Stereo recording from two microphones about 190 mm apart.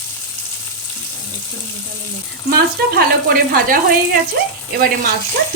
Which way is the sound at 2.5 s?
50° right (ahead or behind).